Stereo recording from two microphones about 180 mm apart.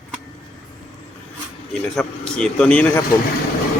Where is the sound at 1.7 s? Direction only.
5° left (ahead or behind).